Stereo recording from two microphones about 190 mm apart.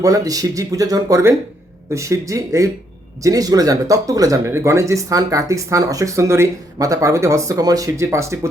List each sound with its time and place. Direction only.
0.0 s speech: 20° right (ahead or behind)